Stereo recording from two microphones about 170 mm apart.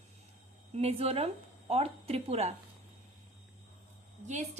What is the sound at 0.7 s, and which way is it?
A woman's voice, 40° right (ahead or behind).